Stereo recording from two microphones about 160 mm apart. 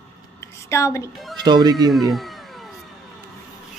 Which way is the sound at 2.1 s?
Centre (ahead or behind).